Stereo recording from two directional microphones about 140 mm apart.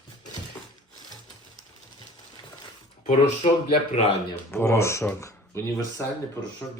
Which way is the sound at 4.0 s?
50° left (ahead or behind).